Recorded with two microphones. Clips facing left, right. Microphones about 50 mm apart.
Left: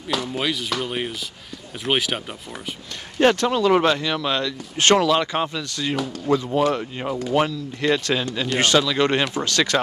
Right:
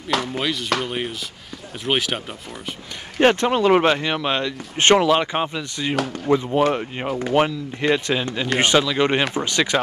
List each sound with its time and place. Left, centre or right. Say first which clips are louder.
0.1 s speech: right 3 dB; right
0.4 s speech: right 2 dB; centre
3.2 s speech: right 1 dB; right